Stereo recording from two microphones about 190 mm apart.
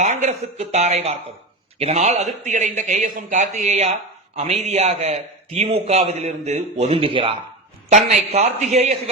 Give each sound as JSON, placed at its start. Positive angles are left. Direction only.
{"t": 0.0, "sound": "a man's voice", "side_deg": -40}